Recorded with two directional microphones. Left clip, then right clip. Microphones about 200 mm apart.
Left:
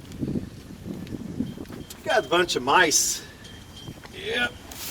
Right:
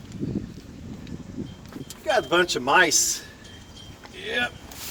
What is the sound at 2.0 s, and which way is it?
Speech, 40° right (ahead or behind).